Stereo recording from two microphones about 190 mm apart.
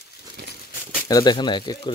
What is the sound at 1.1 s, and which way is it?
Speech, 20° left (ahead or behind).